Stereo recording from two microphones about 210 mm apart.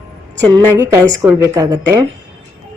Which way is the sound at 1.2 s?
15° right (ahead or behind).